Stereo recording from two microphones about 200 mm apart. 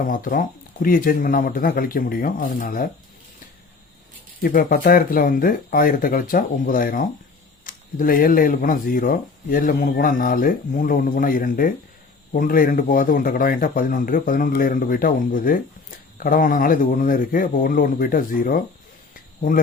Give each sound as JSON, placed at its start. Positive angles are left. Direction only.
{"t": 0.1, "sound": "speech", "side_deg": 45}
{"t": 4.4, "sound": "speech", "side_deg": 45}